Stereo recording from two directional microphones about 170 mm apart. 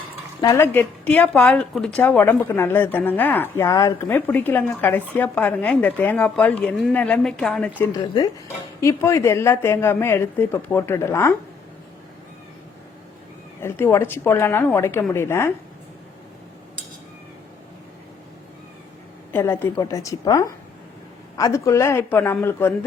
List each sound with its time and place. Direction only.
0.4 s a woman's voice: 15° left (ahead or behind)
8.8 s a woman's voice: 15° left (ahead or behind)
13.6 s a woman's voice: 15° left (ahead or behind)
19.3 s a woman's voice: 15° left (ahead or behind)